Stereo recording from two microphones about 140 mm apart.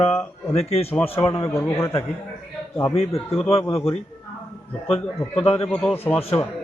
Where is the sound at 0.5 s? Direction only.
45° left (ahead or behind).